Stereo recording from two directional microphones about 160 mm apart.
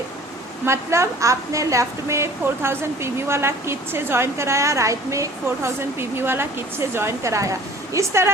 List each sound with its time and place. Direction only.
0.6 s a woman's voice: 15° right (ahead or behind)